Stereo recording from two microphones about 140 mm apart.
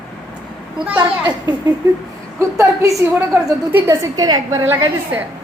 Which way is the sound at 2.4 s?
20° right (ahead or behind).